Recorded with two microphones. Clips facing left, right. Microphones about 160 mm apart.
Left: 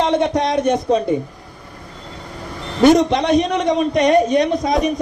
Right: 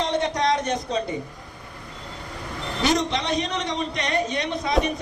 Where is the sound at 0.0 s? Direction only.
60° left (ahead or behind).